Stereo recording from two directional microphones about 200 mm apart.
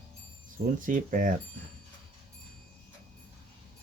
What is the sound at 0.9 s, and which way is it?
Speech, 40° right (ahead or behind).